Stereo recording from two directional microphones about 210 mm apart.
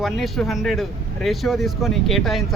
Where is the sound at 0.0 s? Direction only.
Centre (ahead or behind).